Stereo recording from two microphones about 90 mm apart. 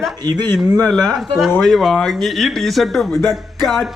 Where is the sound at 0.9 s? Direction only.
5° left (ahead or behind).